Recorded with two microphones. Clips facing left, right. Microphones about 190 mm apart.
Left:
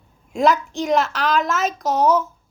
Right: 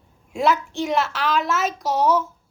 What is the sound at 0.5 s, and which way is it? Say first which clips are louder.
A woman's voice: left 3 dB; 40° left (ahead or behind).